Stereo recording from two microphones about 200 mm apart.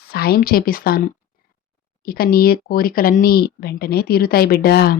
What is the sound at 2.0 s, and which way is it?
A woman's voice, 50° left (ahead or behind).